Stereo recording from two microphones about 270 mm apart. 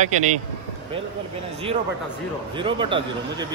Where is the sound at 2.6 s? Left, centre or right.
Centre.